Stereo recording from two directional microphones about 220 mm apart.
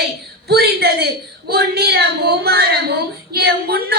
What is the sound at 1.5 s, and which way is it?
A woman's voice, 45° right (ahead or behind).